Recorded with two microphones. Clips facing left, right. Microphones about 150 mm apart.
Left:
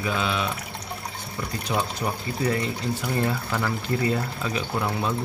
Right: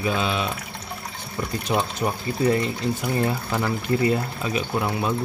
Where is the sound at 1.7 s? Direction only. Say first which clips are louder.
Right 3 dB; 20° right (ahead or behind).